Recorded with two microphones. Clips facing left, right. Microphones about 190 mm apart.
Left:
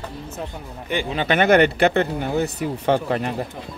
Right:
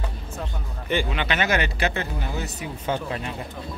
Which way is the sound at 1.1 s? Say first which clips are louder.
Left 8 dB; 50° left (ahead or behind).